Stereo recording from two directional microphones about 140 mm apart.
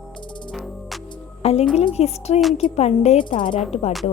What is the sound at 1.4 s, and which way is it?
A woman's voice, 50° left (ahead or behind).